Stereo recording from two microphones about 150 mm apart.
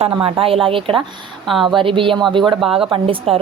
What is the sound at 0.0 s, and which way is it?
Speech, 40° right (ahead or behind).